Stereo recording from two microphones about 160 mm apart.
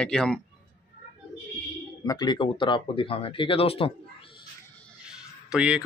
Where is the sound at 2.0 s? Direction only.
25° left (ahead or behind).